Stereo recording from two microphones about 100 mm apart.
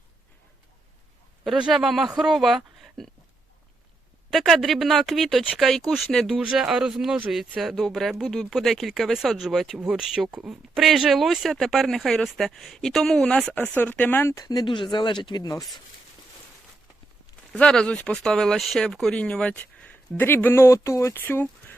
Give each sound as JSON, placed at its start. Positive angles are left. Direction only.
{"t": 1.5, "sound": "speech", "side_deg": -5}
{"t": 4.3, "sound": "speech", "side_deg": 0}
{"t": 14.3, "sound": "speech", "side_deg": 40}
{"t": 17.5, "sound": "speech", "side_deg": 5}